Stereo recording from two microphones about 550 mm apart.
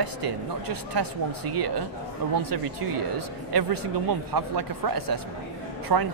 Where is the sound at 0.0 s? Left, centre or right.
Right.